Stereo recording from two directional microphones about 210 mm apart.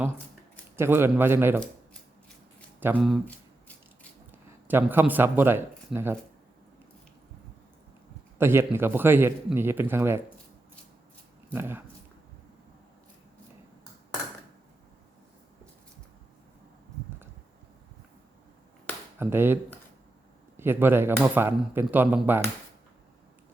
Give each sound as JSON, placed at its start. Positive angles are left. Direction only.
{"t": 0.8, "sound": "speech", "side_deg": -10}
{"t": 2.8, "sound": "speech", "side_deg": -5}
{"t": 8.4, "sound": "speech", "side_deg": -10}
{"t": 11.5, "sound": "speech", "side_deg": -10}
{"t": 19.2, "sound": "speech", "side_deg": -10}
{"t": 20.6, "sound": "speech", "side_deg": -10}